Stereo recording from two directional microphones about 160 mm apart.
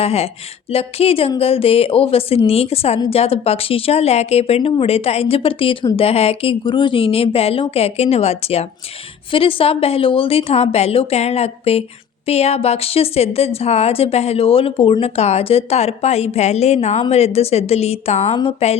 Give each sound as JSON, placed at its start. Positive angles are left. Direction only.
{"t": 0.0, "sound": "a woman's voice", "side_deg": 40}